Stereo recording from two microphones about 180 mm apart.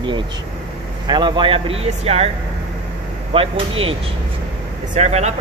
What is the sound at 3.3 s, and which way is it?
Speech, 30° right (ahead or behind).